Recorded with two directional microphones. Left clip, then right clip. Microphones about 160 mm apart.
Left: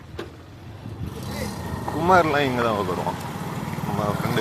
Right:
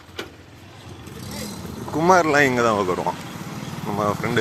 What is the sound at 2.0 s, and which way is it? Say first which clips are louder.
Speech: right 2 dB; 15° right (ahead or behind).